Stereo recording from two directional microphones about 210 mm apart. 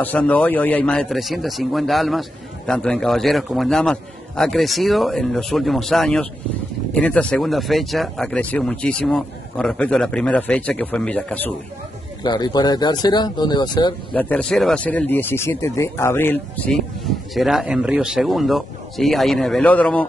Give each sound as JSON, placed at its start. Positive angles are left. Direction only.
{"t": 0.0, "sound": "a man's voice", "side_deg": 5}
{"t": 12.2, "sound": "speech", "side_deg": 20}
{"t": 14.1, "sound": "a man's voice", "side_deg": 5}